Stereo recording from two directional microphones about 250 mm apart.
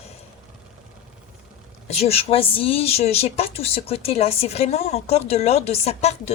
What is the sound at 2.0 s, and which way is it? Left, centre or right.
Speech, left.